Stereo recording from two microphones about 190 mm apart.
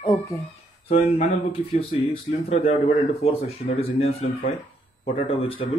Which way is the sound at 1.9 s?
30° left (ahead or behind).